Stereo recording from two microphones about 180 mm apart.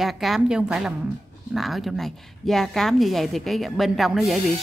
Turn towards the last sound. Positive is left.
turn(degrees=0)  # may be behind; listen again after turning